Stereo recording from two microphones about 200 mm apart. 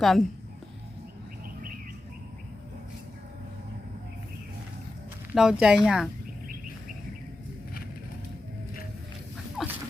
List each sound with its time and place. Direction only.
0.0 s speech: centre (ahead or behind)
5.3 s speech: 5° right (ahead or behind)
9.6 s a sound: centre (ahead or behind)